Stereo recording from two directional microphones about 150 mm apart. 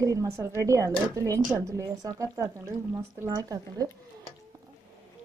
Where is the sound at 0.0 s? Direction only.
20° right (ahead or behind).